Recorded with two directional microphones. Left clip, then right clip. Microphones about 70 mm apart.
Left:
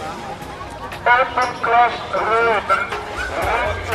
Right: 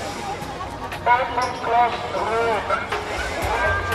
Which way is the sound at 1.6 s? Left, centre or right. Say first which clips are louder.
Left 4 dB; left.